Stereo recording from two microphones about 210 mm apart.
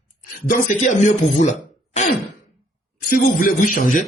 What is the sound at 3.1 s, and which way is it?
Speech, 40° left (ahead or behind).